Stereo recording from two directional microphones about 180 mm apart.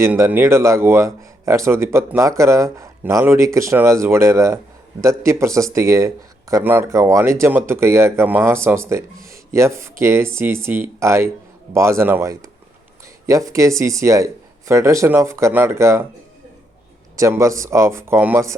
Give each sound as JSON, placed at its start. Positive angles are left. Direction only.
{"t": 0.0, "sound": "speech", "side_deg": -10}
{"t": 17.2, "sound": "speech", "side_deg": -15}